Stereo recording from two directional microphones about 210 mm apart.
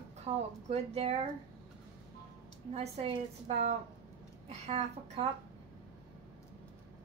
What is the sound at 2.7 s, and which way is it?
A woman's voice, 30° right (ahead or behind).